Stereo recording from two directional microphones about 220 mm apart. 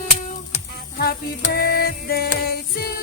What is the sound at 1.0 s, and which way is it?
Music, 45° left (ahead or behind).